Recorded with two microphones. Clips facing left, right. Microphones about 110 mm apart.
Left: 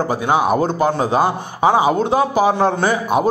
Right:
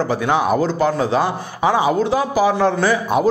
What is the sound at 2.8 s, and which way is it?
Speech, 20° left (ahead or behind).